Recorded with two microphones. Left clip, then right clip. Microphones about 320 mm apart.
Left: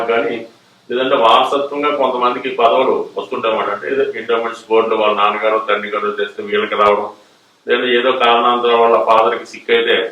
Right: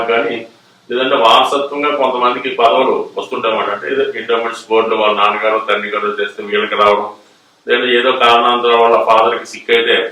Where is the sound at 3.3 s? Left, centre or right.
Centre.